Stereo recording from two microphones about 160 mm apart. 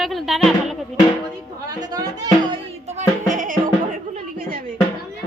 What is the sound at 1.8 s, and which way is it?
Speech, 25° right (ahead or behind).